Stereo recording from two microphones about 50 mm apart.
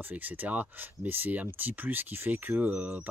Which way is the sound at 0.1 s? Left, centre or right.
Right.